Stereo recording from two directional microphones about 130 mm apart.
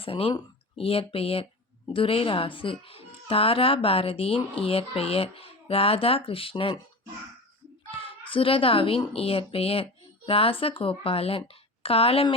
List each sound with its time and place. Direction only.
0.0 s speech: 45° left (ahead or behind)
7.9 s a child's voice: 40° left (ahead or behind)